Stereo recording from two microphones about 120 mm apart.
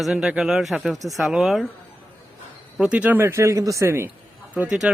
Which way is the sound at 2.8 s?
10° right (ahead or behind).